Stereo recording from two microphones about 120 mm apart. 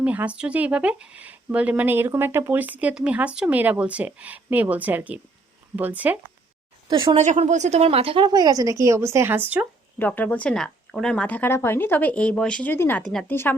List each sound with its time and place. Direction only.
0.0 s speech: 10° right (ahead or behind)
6.9 s a woman's voice: 45° right (ahead or behind)
7.2 s speech: 75° right (ahead or behind); by 8.3 s 50° right (ahead or behind)
8.3 s speech: 30° right (ahead or behind); by 9.6 s 15° right (ahead or behind)
10.0 s speech: 10° left (ahead or behind)
12.7 s speech: 20° left (ahead or behind)
13.0 s a woman's voice: 5° left (ahead or behind)
13.2 s speech: 20° left (ahead or behind)